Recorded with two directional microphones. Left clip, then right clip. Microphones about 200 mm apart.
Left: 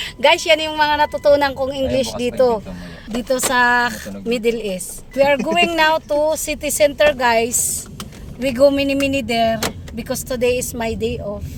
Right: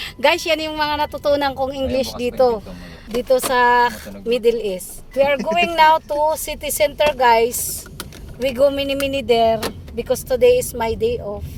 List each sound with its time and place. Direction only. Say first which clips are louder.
0.0 s speech: left 2 dB; centre (ahead or behind)